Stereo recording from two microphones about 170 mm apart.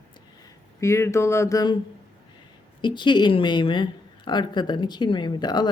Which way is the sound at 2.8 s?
25° left (ahead or behind).